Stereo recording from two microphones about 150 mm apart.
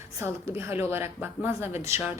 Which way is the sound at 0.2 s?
15° right (ahead or behind).